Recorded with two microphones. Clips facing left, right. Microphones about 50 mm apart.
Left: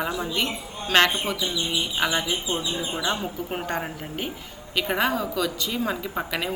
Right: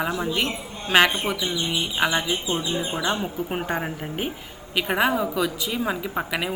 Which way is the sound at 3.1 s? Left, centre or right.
Centre.